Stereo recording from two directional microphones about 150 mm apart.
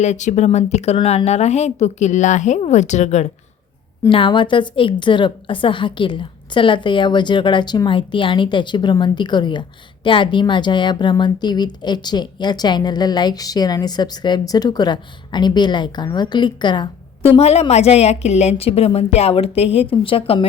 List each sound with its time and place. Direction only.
0.0 s a woman's voice: 50° left (ahead or behind)
4.1 s a woman's voice: 35° left (ahead or behind)
17.3 s a woman's voice: 45° left (ahead or behind)